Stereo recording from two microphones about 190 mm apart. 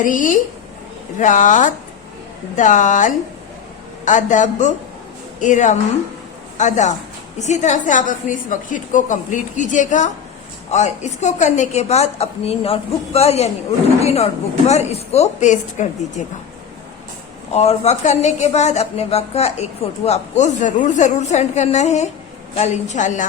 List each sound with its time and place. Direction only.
0.0 s a woman's voice: 45° left (ahead or behind)
17.5 s a woman's voice: 35° left (ahead or behind)